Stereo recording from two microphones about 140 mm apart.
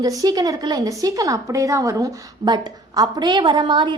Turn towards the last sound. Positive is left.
turn(degrees=-35)  # may be behind; listen again after turning